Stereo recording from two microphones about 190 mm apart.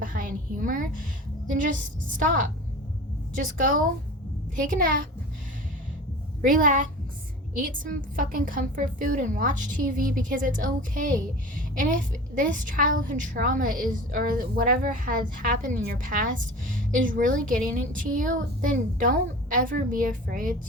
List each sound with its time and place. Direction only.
0.0 s a woman's voice: 45° right (ahead or behind)
6.4 s a woman's voice: 45° right (ahead or behind)